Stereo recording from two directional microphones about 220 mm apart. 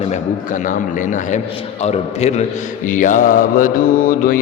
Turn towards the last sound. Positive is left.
turn(degrees=40)  # may be behind; listen again after turning